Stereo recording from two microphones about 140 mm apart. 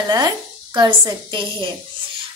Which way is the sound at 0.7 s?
35° right (ahead or behind).